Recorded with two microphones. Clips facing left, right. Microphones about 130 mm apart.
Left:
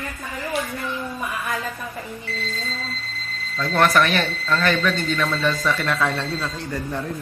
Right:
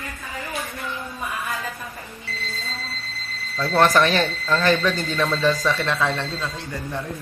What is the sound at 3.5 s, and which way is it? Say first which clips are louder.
Speech: right 1 dB; 35° right (ahead or behind).